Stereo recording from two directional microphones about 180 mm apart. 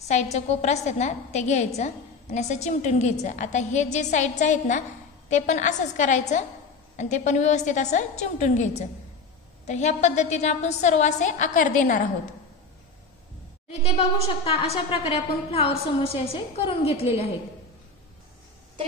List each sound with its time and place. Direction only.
0.1 s a woman's voice: 40° left (ahead or behind)
13.8 s a woman's voice: 35° left (ahead or behind)